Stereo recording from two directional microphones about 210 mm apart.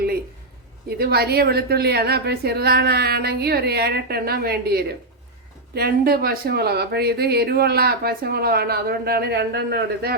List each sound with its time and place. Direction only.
0.9 s speech: 50° right (ahead or behind)